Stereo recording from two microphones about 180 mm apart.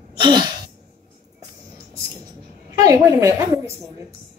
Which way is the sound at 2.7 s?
20° right (ahead or behind).